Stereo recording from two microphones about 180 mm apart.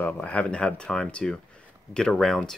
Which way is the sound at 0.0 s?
5° left (ahead or behind).